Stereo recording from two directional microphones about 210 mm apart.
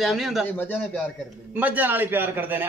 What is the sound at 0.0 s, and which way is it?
Speech, centre (ahead or behind).